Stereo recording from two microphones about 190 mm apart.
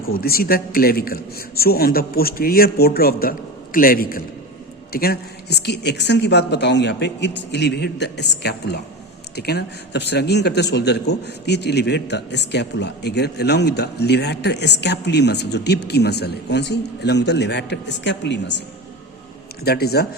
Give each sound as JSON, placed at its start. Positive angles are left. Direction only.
{"t": 0.0, "sound": "a man's voice", "side_deg": 50}
{"t": 19.6, "sound": "a man's voice", "side_deg": 55}